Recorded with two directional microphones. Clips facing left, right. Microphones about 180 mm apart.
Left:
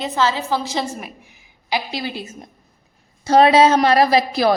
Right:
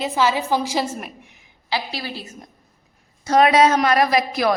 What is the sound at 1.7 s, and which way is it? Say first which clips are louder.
A woman's voice: left 3 dB; 20° left (ahead or behind).